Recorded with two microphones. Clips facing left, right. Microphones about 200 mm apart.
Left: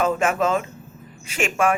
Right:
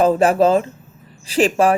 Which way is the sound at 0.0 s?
35° right (ahead or behind).